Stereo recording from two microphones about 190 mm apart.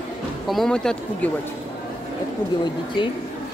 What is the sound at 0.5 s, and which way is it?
Speech, centre (ahead or behind).